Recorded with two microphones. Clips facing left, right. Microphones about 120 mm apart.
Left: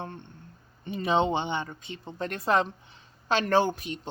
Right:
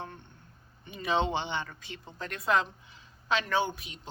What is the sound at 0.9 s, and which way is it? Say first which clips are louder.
Speech: left 4 dB; 25° left (ahead or behind).